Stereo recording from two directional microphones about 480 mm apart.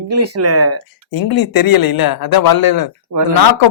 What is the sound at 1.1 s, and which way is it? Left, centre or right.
Speech, left.